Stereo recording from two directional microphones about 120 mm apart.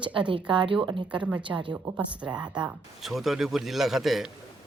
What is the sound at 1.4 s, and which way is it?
Speech, 45° right (ahead or behind).